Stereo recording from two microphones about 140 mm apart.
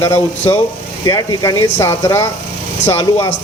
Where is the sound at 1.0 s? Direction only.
25° left (ahead or behind).